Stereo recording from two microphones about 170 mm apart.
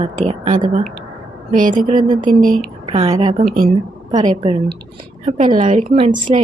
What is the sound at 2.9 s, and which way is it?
A woman's voice, 35° right (ahead or behind).